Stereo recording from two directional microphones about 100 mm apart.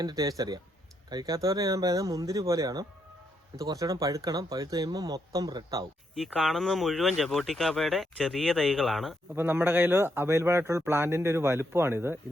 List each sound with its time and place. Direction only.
0.0 s speech: 40° right (ahead or behind)
6.1 s speech: centre (ahead or behind)
9.3 s speech: 20° right (ahead or behind)